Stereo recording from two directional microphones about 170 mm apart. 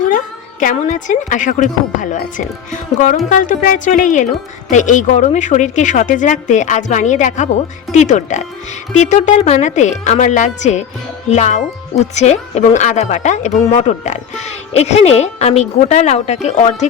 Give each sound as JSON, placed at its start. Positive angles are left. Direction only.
{"t": 0.6, "sound": "a woman's voice", "side_deg": 50}
{"t": 3.2, "sound": "a woman's voice", "side_deg": 50}